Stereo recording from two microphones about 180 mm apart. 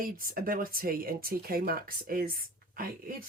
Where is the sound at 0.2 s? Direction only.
50° right (ahead or behind).